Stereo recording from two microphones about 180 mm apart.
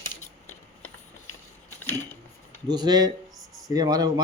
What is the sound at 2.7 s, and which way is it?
Speech, 20° right (ahead or behind).